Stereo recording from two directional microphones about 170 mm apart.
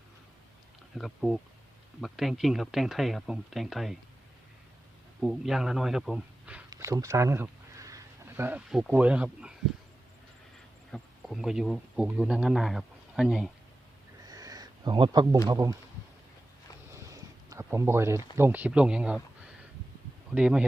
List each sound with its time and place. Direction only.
0.9 s speech: centre (ahead or behind)
5.2 s speech: centre (ahead or behind)
6.7 s speech: 20° right (ahead or behind)
10.9 s speech: centre (ahead or behind)
14.3 s a sound: 20° right (ahead or behind)
15.4 s speech: 20° right (ahead or behind)
16.9 s a sound: 20° right (ahead or behind)
18.3 s speech: 10° right (ahead or behind)
20.3 s speech: 5° right (ahead or behind)